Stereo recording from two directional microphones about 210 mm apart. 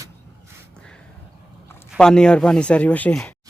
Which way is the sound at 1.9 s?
5° left (ahead or behind).